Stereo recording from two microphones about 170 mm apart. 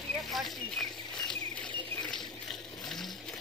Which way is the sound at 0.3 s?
Centre (ahead or behind).